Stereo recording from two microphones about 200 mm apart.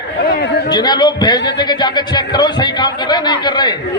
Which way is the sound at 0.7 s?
20° left (ahead or behind).